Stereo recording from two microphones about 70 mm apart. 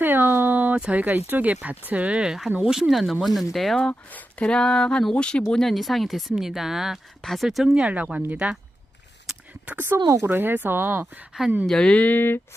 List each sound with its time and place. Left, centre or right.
0.0 s a sound: right
1.9 s speech: centre
4.1 s speech: centre
9.6 s speech: right
11.6 s speech: centre; by 12.4 s left